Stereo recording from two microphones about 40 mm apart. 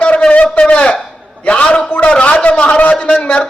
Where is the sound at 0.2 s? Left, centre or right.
Left.